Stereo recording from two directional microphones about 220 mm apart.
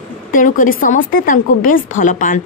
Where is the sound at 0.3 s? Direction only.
40° left (ahead or behind).